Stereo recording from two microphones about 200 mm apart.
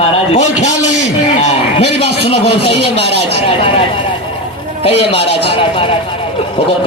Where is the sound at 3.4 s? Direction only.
25° left (ahead or behind).